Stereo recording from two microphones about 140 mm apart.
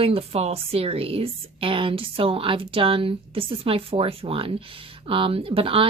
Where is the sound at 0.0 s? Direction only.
45° right (ahead or behind).